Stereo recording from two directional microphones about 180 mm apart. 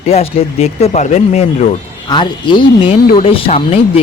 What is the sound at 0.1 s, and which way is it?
Speech, 35° left (ahead or behind).